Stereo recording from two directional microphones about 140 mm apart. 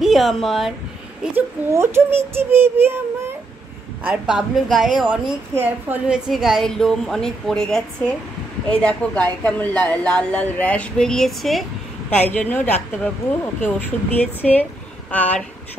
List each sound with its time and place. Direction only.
0.0 s speech: centre (ahead or behind)
1.3 s a child's voice: 20° right (ahead or behind)
4.0 s a woman's voice: 5° right (ahead or behind)
5.5 s a woman's voice: 15° right (ahead or behind); by 11.6 s centre (ahead or behind)
12.1 s a woman's voice: 10° left (ahead or behind)